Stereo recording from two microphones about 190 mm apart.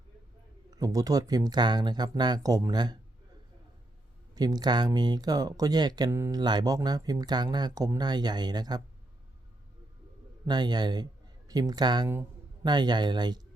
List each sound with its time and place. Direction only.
0.8 s speech: 20° right (ahead or behind)
4.4 s speech: 20° right (ahead or behind)
10.4 s speech: 20° right (ahead or behind)